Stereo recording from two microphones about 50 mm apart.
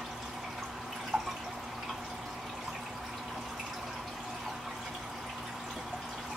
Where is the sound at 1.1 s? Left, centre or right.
Centre.